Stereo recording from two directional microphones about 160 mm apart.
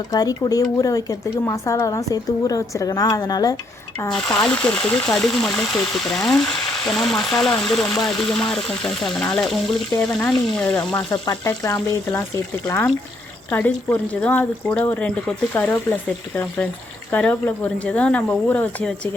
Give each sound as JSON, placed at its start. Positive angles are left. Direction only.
{"t": 0.1, "sound": "a woman's voice", "side_deg": 25}
{"t": 4.1, "sound": "speech", "side_deg": 5}
{"t": 11.1, "sound": "a woman's voice", "side_deg": 20}